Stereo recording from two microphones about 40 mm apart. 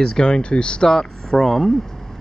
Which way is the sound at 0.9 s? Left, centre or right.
Centre.